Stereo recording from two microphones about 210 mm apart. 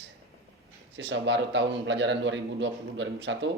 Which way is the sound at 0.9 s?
60° right (ahead or behind).